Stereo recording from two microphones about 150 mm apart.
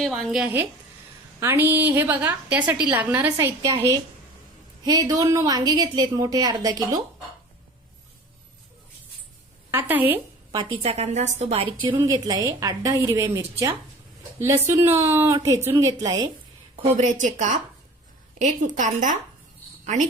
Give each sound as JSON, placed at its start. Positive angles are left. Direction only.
{"t": 0.0, "sound": "a woman's voice", "side_deg": 0}
{"t": 4.8, "sound": "a woman's voice", "side_deg": -25}
{"t": 9.7, "sound": "a woman's voice", "side_deg": -10}
{"t": 10.5, "sound": "a woman's voice", "side_deg": -35}
{"t": 10.9, "sound": "a woman's voice", "side_deg": -50}
{"t": 12.0, "sound": "a woman's voice", "side_deg": -25}
{"t": 17.0, "sound": "a woman's voice", "side_deg": -55}